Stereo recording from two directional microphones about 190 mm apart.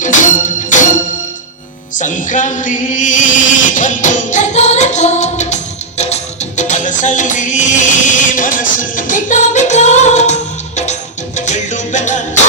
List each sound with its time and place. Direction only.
0.0 s music: 40° left (ahead or behind)
2.0 s a sound: 45° left (ahead or behind)
6.0 s music: 35° left (ahead or behind)